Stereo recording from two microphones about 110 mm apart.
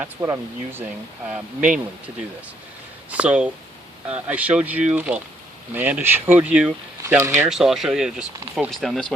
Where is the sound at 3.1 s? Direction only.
10° right (ahead or behind).